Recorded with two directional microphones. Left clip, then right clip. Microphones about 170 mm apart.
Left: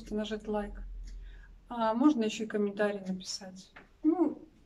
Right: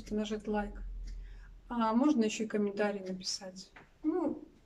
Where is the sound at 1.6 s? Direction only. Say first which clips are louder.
Left 2 dB; 5° right (ahead or behind).